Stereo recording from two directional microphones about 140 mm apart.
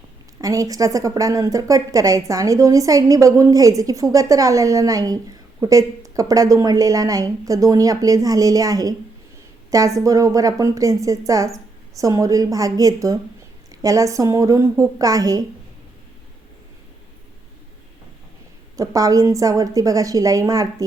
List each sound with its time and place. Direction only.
0.4 s a woman's voice: 25° right (ahead or behind)
18.8 s a woman's voice: 25° right (ahead or behind)